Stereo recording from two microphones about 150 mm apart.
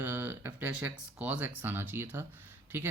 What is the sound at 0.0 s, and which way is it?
Speech, 15° right (ahead or behind).